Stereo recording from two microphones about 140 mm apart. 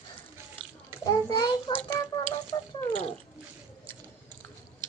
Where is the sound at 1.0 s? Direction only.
35° left (ahead or behind).